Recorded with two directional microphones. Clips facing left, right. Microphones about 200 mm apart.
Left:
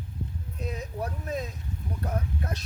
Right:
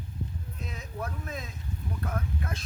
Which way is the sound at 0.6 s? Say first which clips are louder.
Left 5 dB; 35° left (ahead or behind).